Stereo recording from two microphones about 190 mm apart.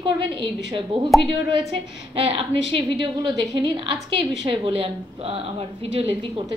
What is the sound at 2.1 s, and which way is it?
Speech, 30° right (ahead or behind).